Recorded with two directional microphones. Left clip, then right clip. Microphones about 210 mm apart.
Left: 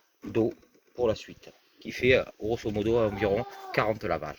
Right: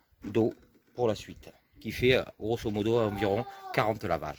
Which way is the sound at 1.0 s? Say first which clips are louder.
Left 2 dB; 60° right (ahead or behind).